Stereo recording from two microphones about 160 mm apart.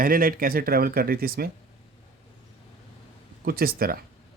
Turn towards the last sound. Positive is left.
turn(degrees=-65)  # may be behind; listen again after turning